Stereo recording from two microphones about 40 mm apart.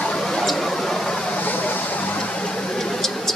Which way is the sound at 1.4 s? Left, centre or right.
Left.